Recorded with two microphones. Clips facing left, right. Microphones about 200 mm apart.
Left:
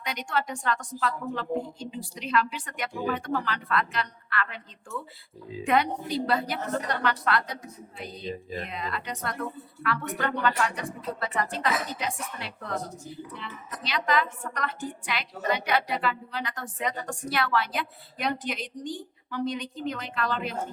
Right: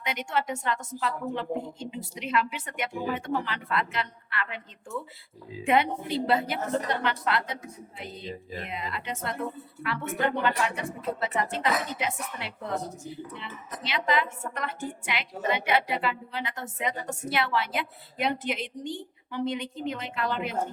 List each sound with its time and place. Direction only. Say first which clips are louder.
0.0 s a woman's voice: right 1 dB; 20° right (ahead or behind)